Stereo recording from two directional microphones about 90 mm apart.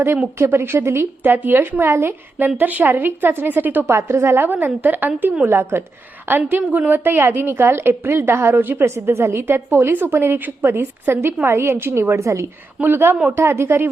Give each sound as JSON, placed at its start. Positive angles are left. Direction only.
{"t": 0.3, "sound": "a woman's voice", "side_deg": -30}